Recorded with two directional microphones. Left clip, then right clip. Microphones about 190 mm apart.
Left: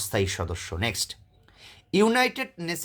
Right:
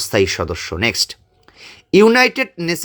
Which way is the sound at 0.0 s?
30° right (ahead or behind).